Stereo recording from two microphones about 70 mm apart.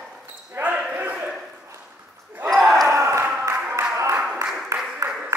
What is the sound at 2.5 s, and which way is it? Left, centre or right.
Basketball bounce, centre.